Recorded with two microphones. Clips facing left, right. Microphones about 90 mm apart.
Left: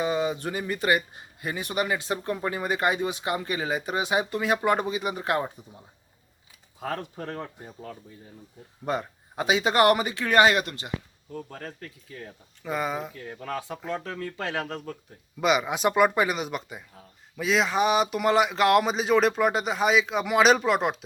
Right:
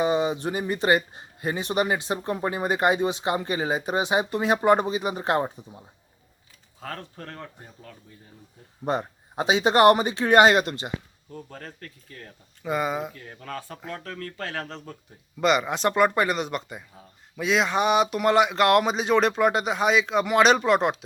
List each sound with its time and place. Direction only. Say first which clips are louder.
0.0 s speech: right 3 dB; 20° right (ahead or behind)
6.7 s speech: left 5 dB; 15° left (ahead or behind)
8.8 s speech: right 2 dB; 25° right (ahead or behind)
11.3 s speech: left 2 dB; centre (ahead or behind)